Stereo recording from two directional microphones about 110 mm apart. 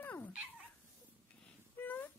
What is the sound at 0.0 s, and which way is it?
Dog, 15° left (ahead or behind).